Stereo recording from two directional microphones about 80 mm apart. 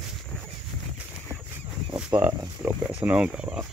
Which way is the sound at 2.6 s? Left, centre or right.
Centre.